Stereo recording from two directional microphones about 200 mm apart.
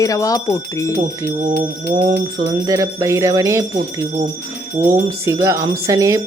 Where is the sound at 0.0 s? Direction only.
15° left (ahead or behind).